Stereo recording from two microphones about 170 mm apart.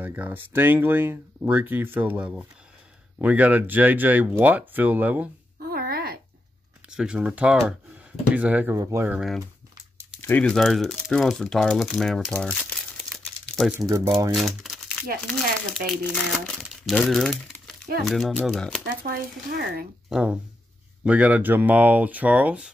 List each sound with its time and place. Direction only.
0.0 s speech: 10° right (ahead or behind)
5.6 s a sound: 60° right (ahead or behind)
6.9 s speech: 5° right (ahead or behind)
10.2 s speech: 10° left (ahead or behind)
13.7 s speech: 15° right (ahead or behind)
14.3 s speech: centre (ahead or behind)
19.1 s speech: 65° right (ahead or behind)
20.1 s speech: 5° right (ahead or behind)